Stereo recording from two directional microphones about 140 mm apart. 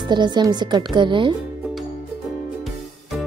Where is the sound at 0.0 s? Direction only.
30° right (ahead or behind).